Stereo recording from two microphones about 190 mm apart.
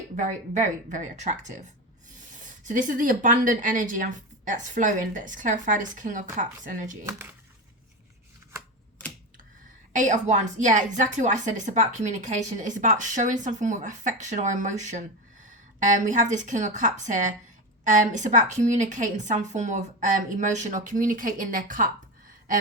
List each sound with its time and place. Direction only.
0.2 s a woman's voice: 40° right (ahead or behind)
7.0 s speech: 10° right (ahead or behind)
9.9 s a woman's voice: 40° right (ahead or behind)